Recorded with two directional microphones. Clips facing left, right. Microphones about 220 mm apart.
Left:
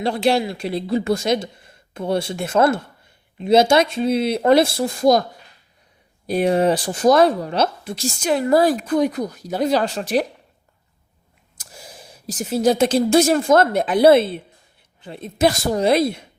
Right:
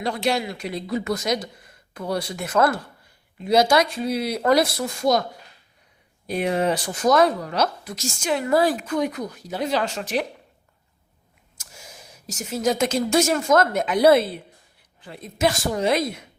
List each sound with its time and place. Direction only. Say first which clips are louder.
0.0 s speech: left 5 dB; 30° left (ahead or behind)
6.2 s speech: left 5 dB; 35° left (ahead or behind)
11.5 s speech: left 4 dB; 35° left (ahead or behind)